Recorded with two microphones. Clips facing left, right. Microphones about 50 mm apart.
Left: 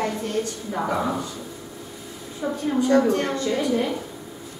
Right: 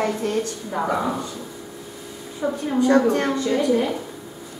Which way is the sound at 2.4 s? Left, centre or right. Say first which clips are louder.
Right 2 dB; centre.